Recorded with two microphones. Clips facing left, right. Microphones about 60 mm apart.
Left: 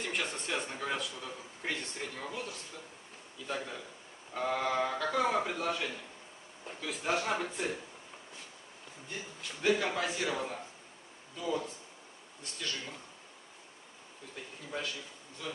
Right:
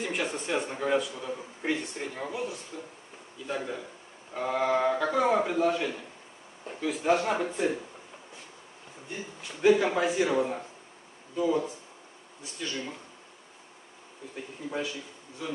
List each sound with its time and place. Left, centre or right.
0.0 s a man's voice: centre
9.4 s a man's voice: centre
14.3 s a man's voice: centre